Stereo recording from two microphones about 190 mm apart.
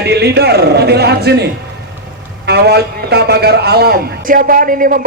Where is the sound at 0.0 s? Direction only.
60° right (ahead or behind).